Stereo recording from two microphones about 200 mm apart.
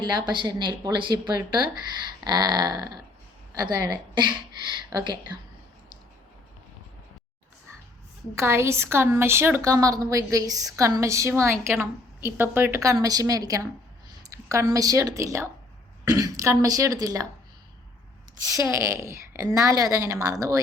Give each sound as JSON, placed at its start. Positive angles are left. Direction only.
{"t": 0.0, "sound": "a woman's voice", "side_deg": -20}
{"t": 8.4, "sound": "a woman's voice", "side_deg": -15}
{"t": 18.4, "sound": "a woman's voice", "side_deg": -15}